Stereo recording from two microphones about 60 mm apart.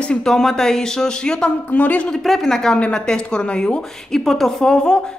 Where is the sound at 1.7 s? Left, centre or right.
Left.